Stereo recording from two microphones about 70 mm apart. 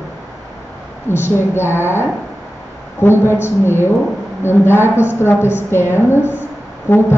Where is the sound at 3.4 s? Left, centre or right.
Left.